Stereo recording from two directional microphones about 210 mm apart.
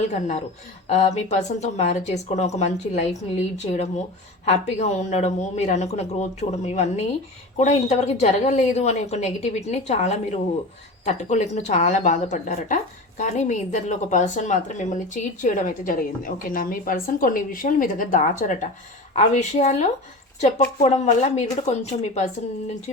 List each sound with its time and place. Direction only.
0.1 s a woman's voice: 35° left (ahead or behind)